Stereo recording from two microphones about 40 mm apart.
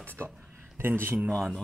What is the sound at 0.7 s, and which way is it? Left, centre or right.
Speech, right.